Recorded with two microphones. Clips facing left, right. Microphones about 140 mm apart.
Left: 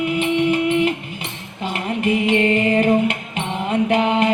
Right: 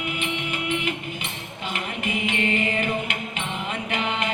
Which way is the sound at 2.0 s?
40° left (ahead or behind).